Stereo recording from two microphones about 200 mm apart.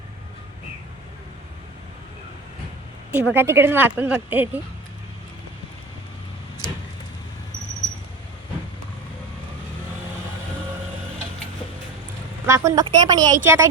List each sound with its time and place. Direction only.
3.1 s speech: 10° right (ahead or behind)
12.5 s speech: 15° right (ahead or behind)